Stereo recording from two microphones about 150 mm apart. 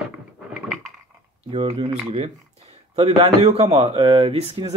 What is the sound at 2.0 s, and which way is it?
Speech, 40° right (ahead or behind).